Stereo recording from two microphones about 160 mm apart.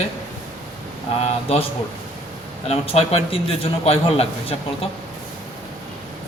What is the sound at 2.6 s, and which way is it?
A man's voice, 40° left (ahead or behind).